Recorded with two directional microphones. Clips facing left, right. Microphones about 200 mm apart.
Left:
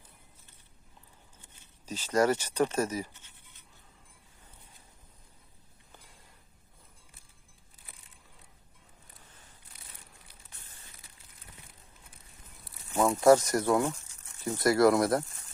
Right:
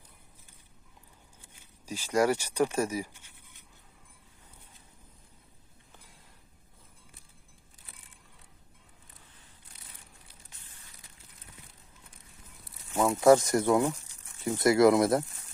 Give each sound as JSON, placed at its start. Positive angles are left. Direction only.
{"t": 1.9, "sound": "speech", "side_deg": -10}
{"t": 13.0, "sound": "speech", "side_deg": -10}